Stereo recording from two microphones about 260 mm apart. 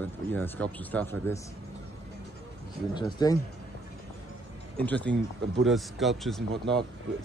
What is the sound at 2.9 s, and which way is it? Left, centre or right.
Speech, centre.